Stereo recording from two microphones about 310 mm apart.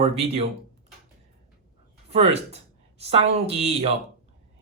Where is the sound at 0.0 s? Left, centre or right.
Centre.